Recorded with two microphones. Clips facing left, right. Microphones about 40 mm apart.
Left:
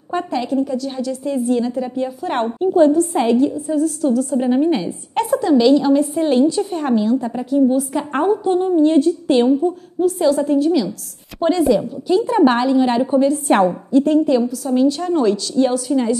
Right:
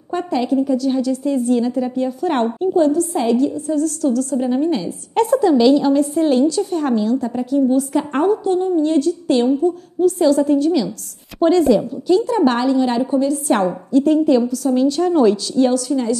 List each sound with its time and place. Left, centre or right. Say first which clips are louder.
0.1 s a woman's voice: right 1 dB; centre
2.7 s a woman's voice: left 4 dB; left
5.1 s a woman's voice: right 2 dB; centre
8.3 s a woman's voice: left 3 dB; centre
9.9 s a woman's voice: right 2 dB; centre
12.3 s a woman's voice: left 2 dB; centre
13.9 s a woman's voice: right 1 dB; centre
15.7 s a woman's voice: even; centre